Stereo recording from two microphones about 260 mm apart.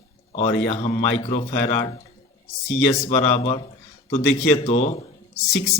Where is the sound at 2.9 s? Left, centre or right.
Left.